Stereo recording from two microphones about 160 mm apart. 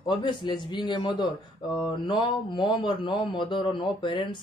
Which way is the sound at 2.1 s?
30° left (ahead or behind).